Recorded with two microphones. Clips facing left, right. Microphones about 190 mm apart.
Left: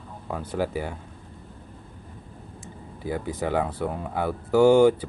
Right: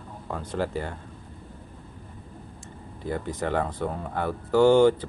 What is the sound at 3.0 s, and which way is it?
Speech, 10° left (ahead or behind).